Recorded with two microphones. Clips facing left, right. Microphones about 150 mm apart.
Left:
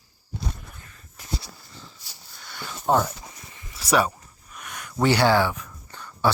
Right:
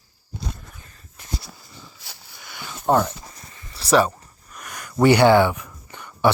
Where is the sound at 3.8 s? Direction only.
5° left (ahead or behind).